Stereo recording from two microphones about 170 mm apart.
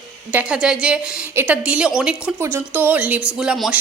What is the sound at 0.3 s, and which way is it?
A woman's voice, 5° right (ahead or behind).